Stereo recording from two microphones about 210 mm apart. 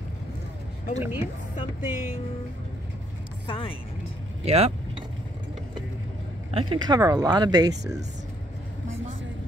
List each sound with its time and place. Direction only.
0.9 s speech: 10° right (ahead or behind)
3.4 s speech: 25° left (ahead or behind)
4.5 s speech: 30° right (ahead or behind)
6.5 s speech: 25° right (ahead or behind)